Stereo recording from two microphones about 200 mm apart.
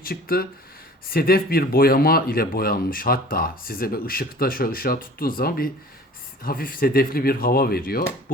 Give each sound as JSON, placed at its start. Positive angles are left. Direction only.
{"t": 0.0, "sound": "speech", "side_deg": 50}